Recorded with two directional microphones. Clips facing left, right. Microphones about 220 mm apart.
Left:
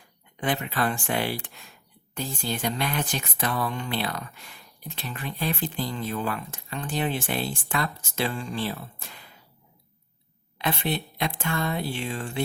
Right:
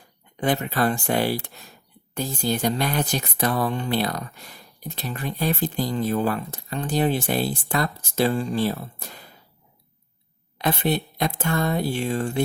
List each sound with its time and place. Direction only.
0.3 s speech: 40° right (ahead or behind)
10.6 s speech: 40° right (ahead or behind)